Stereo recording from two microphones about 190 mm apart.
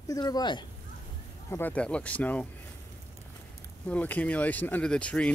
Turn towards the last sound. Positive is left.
turn(degrees=5)  # may be behind; listen again after turning